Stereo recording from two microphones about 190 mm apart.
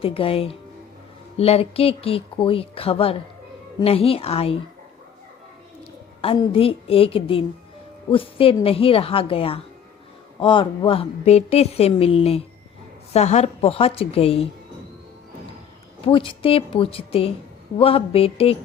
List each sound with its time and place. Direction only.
0.0 s a woman's voice: 30° left (ahead or behind)
6.2 s a woman's voice: 25° left (ahead or behind)
16.0 s a woman's voice: 30° left (ahead or behind)